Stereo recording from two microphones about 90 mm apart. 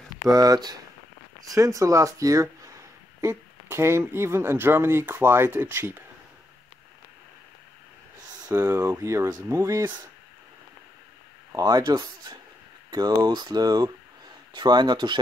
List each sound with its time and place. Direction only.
0.3 s speech: 45° right (ahead or behind); by 6.0 s 25° right (ahead or behind)
8.3 s speech: 35° right (ahead or behind)
11.5 s speech: 45° right (ahead or behind)